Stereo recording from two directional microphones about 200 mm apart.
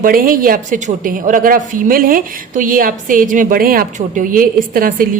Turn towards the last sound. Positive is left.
turn(degrees=-45)  # may be behind; listen again after turning